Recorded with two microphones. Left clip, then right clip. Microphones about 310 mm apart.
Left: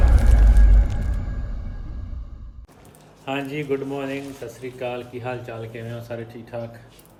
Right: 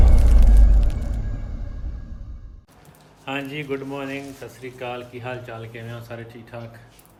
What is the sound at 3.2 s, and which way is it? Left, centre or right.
Speech, centre.